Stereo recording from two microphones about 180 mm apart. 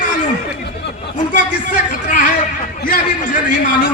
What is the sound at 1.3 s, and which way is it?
A man's voice, 45° left (ahead or behind).